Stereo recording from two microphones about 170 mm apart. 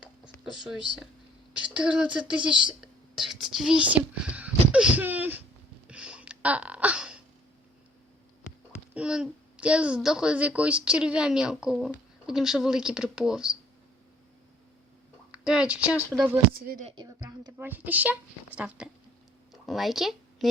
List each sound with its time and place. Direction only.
0.5 s a child's voice: centre (ahead or behind)
2.8 s whispering: centre (ahead or behind)
5.9 s a sound: 5° right (ahead or behind)
9.0 s a child's voice: 5° right (ahead or behind)
15.3 s a child's voice: 5° right (ahead or behind)
16.9 s speech: 25° right (ahead or behind); by 20.5 s centre (ahead or behind)